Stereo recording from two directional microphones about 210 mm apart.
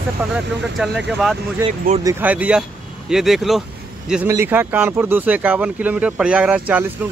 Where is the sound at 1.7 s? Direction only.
30° right (ahead or behind).